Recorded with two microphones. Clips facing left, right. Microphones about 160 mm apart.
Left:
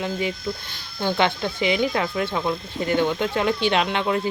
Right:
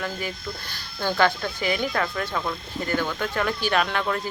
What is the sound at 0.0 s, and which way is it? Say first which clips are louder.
Speech: left 5 dB; 20° left (ahead or behind).